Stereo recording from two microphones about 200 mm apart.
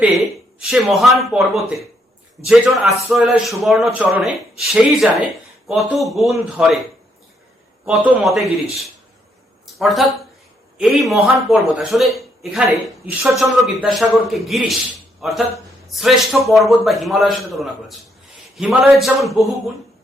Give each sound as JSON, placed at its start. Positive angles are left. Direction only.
{"t": 0.6, "sound": "speech", "side_deg": 0}
{"t": 3.1, "sound": "speech", "side_deg": 0}
{"t": 7.9, "sound": "a man's voice", "side_deg": -5}